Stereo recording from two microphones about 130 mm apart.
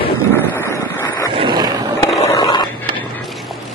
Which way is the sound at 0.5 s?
20° left (ahead or behind).